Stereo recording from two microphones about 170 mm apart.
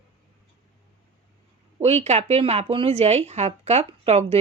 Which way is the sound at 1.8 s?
40° right (ahead or behind).